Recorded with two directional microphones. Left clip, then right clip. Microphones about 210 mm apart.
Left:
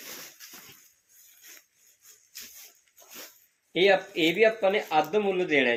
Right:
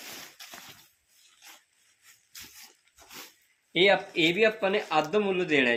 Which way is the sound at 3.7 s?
55° right (ahead or behind).